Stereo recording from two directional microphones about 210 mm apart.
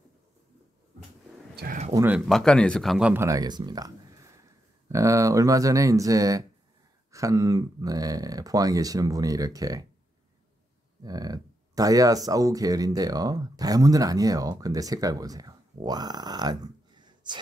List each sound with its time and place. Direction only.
1.6 s a sound: 40° right (ahead or behind)
2.0 s speech: 5° right (ahead or behind)
11.0 s speech: 20° right (ahead or behind)